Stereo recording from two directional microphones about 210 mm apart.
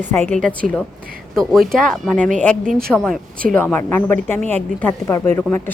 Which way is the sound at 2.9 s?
5° left (ahead or behind).